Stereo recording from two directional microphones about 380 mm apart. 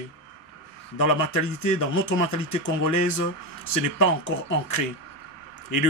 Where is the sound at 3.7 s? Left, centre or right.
Left.